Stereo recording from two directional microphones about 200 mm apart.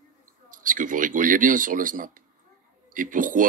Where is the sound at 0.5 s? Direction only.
40° right (ahead or behind).